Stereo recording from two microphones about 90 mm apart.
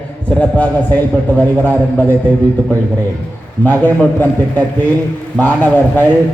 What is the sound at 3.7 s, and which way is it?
A man's voice, 20° left (ahead or behind).